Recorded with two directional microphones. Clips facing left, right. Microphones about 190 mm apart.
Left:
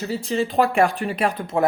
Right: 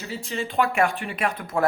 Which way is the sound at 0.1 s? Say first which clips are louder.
Left 6 dB; 40° left (ahead or behind).